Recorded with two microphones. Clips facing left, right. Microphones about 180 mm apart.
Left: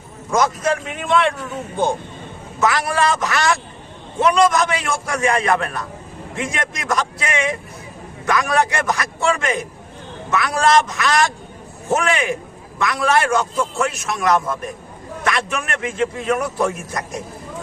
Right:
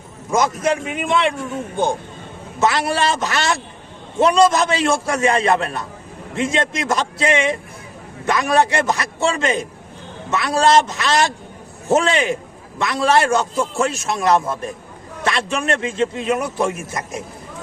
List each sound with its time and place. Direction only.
0.3 s a man's voice: 20° right (ahead or behind)
2.6 s a man's voice: 25° right (ahead or behind)